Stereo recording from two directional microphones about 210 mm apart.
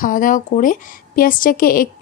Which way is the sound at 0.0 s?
40° left (ahead or behind).